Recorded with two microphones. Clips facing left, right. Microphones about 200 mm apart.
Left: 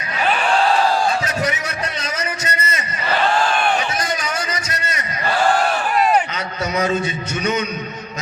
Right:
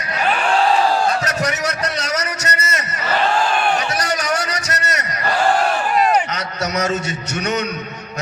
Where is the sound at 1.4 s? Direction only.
75° right (ahead or behind).